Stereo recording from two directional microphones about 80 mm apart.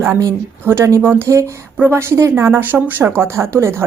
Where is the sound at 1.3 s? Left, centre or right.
Right.